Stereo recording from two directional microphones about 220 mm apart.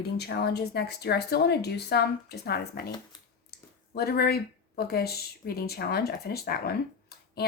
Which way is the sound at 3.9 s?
45° left (ahead or behind).